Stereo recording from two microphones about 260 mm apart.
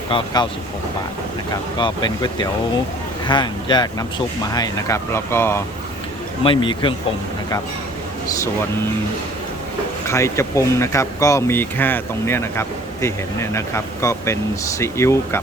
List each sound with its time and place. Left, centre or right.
1.8 s speech: centre
6.4 s speech: centre
10.1 s speech: centre